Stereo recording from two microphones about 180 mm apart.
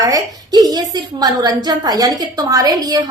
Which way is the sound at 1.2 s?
20° right (ahead or behind).